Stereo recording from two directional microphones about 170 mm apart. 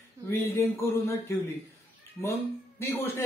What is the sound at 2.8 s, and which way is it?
Speech, 15° left (ahead or behind).